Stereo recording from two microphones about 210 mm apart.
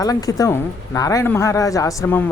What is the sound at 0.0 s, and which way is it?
Speech, 15° left (ahead or behind).